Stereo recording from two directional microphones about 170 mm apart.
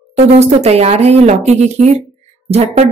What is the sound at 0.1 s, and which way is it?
A woman's voice, 40° right (ahead or behind).